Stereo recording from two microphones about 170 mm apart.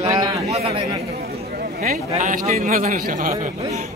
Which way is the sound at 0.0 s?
40° right (ahead or behind).